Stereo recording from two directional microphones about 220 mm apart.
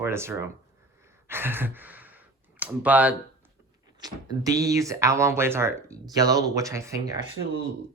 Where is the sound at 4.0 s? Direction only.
20° right (ahead or behind).